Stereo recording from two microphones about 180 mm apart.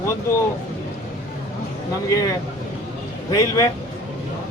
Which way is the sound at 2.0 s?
15° left (ahead or behind).